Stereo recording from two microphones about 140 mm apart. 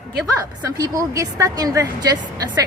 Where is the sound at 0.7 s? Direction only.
25° right (ahead or behind).